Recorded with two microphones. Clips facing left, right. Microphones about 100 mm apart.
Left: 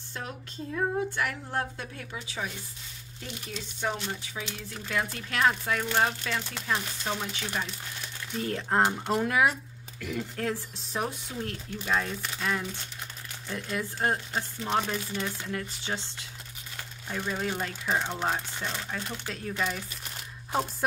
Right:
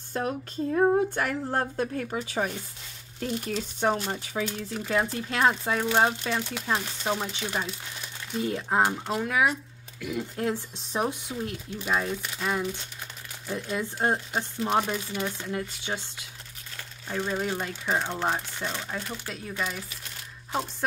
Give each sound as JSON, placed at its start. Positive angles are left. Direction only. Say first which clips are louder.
{"t": 0.2, "sound": "a woman's voice", "louder": "right 9 dB", "side_deg": -45}
{"t": 4.8, "sound": "speech", "louder": "right 4 dB", "side_deg": -25}
{"t": 8.4, "sound": "speech", "louder": "right 1 dB", "side_deg": -10}
{"t": 9.5, "sound": "speech", "louder": "right 2 dB", "side_deg": -10}
{"t": 13.5, "sound": "speech", "louder": "right 3 dB", "side_deg": -20}
{"t": 17.1, "sound": "speech", "louder": "right 3 dB", "side_deg": -10}